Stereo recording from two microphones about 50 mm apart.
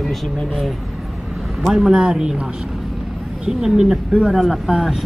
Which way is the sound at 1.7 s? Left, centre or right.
Centre.